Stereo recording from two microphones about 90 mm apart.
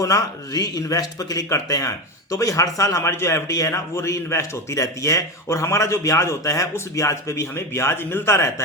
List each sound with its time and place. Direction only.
0.0 s a man's voice: 40° left (ahead or behind)